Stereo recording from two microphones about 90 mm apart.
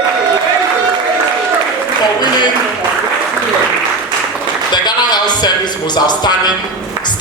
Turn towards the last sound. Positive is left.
turn(degrees=55)  # may be behind; listen again after turning